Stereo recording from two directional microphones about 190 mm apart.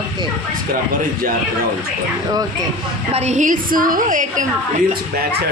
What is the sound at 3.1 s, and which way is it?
A woman's voice, 35° right (ahead or behind).